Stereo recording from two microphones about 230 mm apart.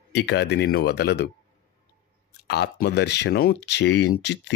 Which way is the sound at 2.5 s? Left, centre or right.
Left.